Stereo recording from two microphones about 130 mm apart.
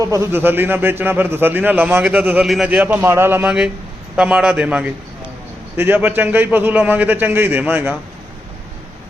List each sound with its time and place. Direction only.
0.0 s a man's voice: 25° right (ahead or behind)